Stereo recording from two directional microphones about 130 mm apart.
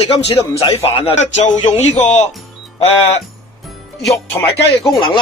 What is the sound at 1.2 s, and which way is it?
Speech, 60° left (ahead or behind).